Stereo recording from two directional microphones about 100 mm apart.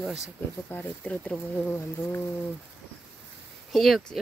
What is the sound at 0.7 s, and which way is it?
Speech, 20° left (ahead or behind).